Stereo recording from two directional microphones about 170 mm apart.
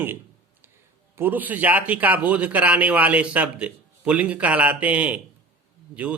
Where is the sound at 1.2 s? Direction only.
10° right (ahead or behind).